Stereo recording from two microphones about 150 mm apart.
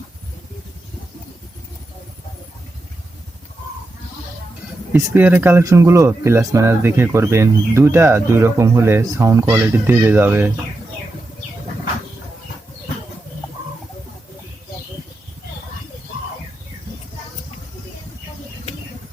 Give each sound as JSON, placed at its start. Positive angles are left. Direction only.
{"t": 4.9, "sound": "speech", "side_deg": -15}